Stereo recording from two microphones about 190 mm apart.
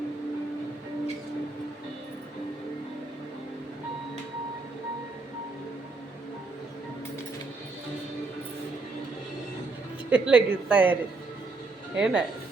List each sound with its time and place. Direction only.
10.1 s speech: 5° right (ahead or behind)
11.9 s speech: 5° right (ahead or behind)